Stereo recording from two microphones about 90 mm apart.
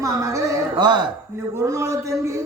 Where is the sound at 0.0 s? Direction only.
35° right (ahead or behind).